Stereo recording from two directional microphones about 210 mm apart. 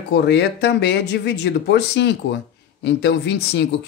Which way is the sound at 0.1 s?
55° left (ahead or behind).